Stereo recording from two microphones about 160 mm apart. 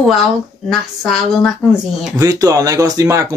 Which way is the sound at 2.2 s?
20° right (ahead or behind).